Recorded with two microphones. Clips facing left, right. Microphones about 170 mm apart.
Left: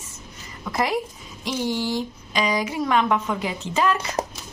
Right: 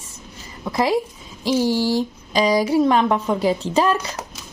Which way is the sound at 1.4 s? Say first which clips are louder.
Right 6 dB; 35° right (ahead or behind).